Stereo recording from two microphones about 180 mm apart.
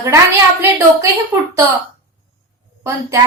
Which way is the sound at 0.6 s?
15° right (ahead or behind).